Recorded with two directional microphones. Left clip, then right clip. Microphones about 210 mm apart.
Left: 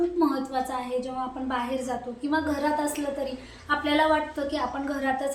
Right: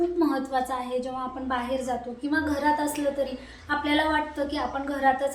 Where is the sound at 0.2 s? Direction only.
5° left (ahead or behind).